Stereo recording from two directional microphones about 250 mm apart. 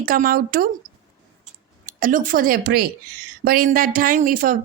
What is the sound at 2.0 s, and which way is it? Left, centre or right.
A woman's voice, right.